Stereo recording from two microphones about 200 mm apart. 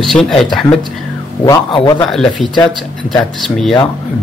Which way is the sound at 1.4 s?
20° left (ahead or behind).